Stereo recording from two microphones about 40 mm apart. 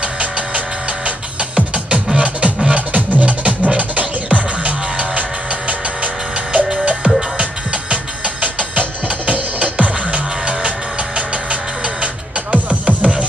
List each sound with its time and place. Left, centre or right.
2.1 s music: right
6.8 s music: right
12.0 s music: right